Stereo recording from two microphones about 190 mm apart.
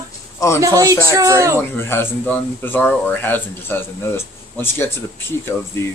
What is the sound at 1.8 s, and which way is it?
Speech, 10° left (ahead or behind).